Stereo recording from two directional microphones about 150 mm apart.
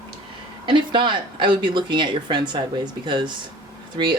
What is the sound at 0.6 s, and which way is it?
Speech, 35° right (ahead or behind).